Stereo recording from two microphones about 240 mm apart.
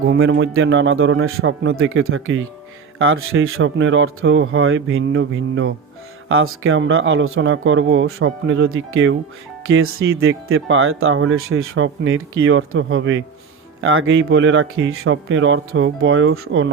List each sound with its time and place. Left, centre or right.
0.1 s speech: right